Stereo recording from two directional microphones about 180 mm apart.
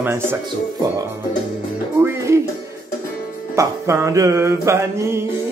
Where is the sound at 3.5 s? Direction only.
15° right (ahead or behind).